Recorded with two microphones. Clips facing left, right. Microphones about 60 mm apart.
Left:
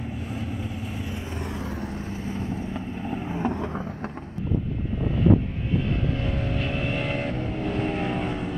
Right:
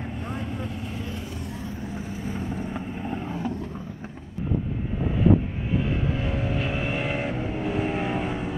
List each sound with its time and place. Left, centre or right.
0.3 s vehicle: centre
1.4 s vehicle: left
2.7 s boat: centre
5.1 s vehicle: centre